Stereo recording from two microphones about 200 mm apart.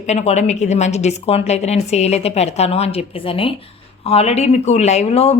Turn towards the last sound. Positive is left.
turn(degrees=30)  # may be behind; listen again after turning